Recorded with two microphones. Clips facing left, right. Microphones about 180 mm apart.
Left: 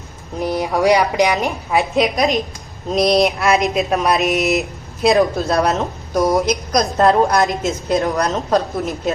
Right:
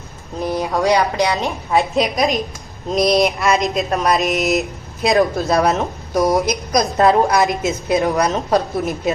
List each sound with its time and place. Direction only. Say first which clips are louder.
0.3 s speech: left 1 dB; 15° left (ahead or behind)
1.7 s a woman's voice: even; centre (ahead or behind)